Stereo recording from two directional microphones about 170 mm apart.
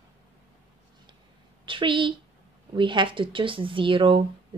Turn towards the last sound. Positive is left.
turn(degrees=-30)  # may be behind; listen again after turning